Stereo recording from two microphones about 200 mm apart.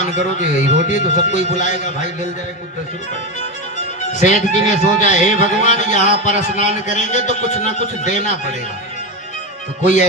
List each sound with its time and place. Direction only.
0.0 s speech: 35° left (ahead or behind)
4.1 s speech: 35° left (ahead or behind)